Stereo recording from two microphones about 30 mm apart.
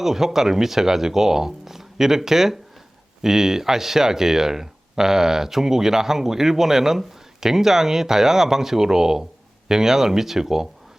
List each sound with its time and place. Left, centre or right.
0.0 s speech: centre